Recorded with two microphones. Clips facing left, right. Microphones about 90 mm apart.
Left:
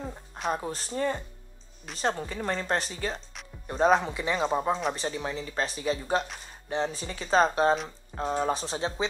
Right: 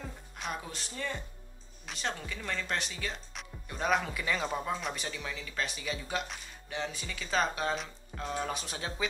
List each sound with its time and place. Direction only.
0.0 s speech: 35° left (ahead or behind)